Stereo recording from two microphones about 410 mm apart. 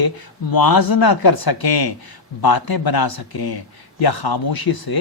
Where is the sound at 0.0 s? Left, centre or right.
Left.